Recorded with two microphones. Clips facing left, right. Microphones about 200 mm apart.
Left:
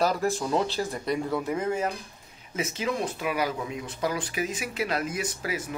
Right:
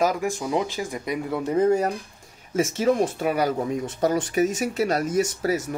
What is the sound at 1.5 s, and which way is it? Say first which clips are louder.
Speech: right 7 dB; 35° right (ahead or behind).